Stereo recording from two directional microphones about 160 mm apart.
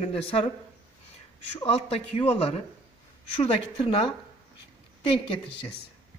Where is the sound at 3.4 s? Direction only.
35° left (ahead or behind).